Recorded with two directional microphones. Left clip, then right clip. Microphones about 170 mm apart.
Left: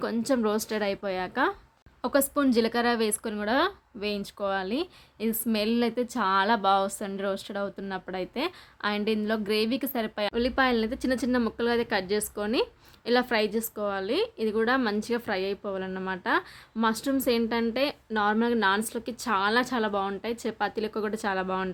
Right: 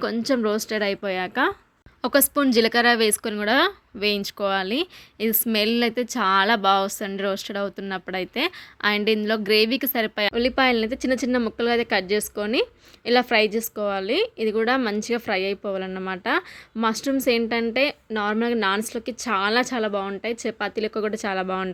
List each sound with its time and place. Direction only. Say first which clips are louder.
0.0 s speech: right 4 dB; 15° right (ahead or behind)